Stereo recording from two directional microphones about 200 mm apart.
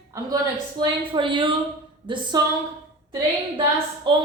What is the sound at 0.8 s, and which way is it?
A woman's voice, 25° right (ahead or behind).